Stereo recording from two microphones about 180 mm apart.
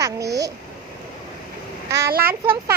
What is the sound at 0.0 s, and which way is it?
Babbling, 20° right (ahead or behind).